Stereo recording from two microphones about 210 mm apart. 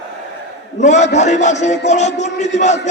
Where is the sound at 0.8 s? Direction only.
35° left (ahead or behind).